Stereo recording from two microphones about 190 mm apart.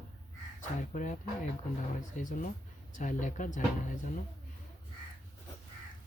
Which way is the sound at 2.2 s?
40° left (ahead or behind).